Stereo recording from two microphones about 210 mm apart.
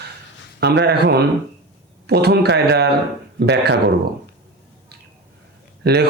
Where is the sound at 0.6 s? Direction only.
55° right (ahead or behind).